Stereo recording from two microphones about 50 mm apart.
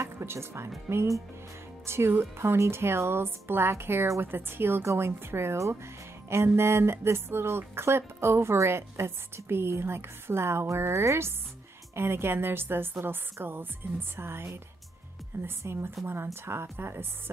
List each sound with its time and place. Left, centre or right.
0.0 s speech: right
1.9 s a woman's voice: right